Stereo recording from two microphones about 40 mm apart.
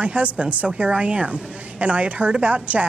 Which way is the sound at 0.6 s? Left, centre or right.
Right.